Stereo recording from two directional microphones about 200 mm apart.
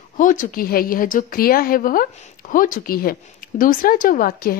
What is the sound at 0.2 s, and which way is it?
A woman's voice, 40° left (ahead or behind).